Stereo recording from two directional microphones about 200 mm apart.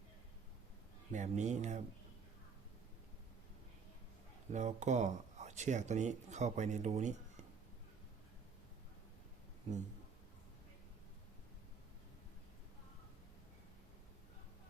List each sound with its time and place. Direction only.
1.1 s speech: 35° right (ahead or behind)
4.5 s speech: 35° right (ahead or behind)